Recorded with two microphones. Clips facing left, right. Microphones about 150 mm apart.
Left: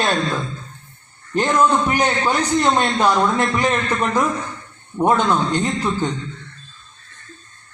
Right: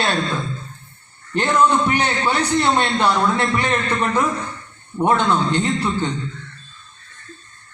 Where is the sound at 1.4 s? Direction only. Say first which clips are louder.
Even; 10° left (ahead or behind).